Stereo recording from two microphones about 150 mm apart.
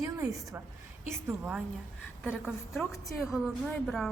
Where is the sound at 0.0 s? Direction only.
20° right (ahead or behind).